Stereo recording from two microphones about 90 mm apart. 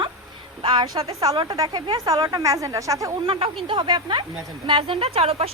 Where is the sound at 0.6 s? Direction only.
65° right (ahead or behind).